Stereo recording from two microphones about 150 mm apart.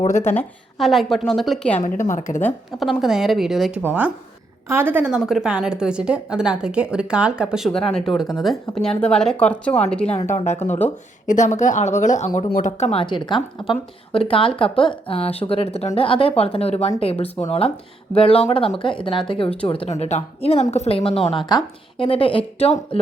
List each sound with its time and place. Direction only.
0.2 s a woman's voice: 15° left (ahead or behind)
0.8 s a woman's voice: centre (ahead or behind)
2.0 s speech: 60° left (ahead or behind)
3.0 s a woman's voice: centre (ahead or behind)
10.3 s speech: 50° left (ahead or behind)
12.5 s speech: 75° left (ahead or behind)
12.7 s speech: 45° left (ahead or behind)